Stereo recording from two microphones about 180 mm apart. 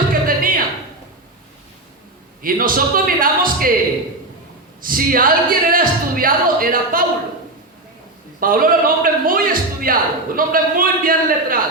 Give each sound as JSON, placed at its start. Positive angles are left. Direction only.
{"t": 0.1, "sound": "a sound", "side_deg": -50}
{"t": 2.4, "sound": "a man's voice", "side_deg": -50}
{"t": 4.8, "sound": "a man's voice", "side_deg": -50}
{"t": 8.4, "sound": "a man's voice", "side_deg": -50}